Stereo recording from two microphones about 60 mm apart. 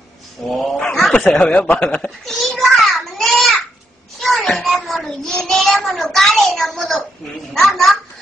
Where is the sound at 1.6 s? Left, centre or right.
Centre.